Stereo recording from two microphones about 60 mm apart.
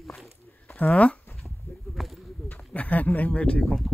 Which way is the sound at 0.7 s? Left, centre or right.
Left.